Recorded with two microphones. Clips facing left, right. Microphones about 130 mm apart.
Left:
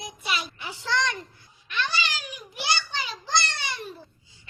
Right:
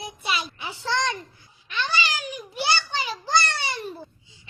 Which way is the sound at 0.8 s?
25° right (ahead or behind).